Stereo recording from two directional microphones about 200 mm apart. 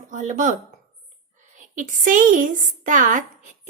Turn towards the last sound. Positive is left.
turn(degrees=-40)  # may be behind; listen again after turning